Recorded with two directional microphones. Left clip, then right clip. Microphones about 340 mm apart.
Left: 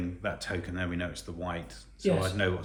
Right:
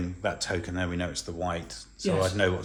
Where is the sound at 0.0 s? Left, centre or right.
Centre.